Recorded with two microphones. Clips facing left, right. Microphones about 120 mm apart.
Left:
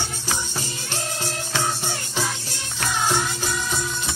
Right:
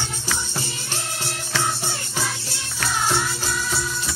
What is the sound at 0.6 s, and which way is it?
Music, 15° left (ahead or behind).